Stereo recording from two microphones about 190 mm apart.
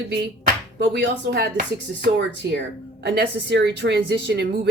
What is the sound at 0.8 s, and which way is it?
Speech, 65° right (ahead or behind).